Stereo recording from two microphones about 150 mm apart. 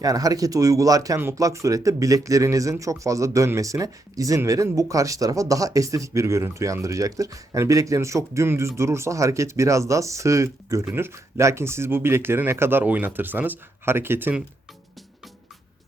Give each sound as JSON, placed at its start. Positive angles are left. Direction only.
{"t": 0.0, "sound": "speech", "side_deg": -25}